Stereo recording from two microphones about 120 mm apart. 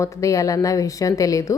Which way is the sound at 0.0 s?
25° left (ahead or behind).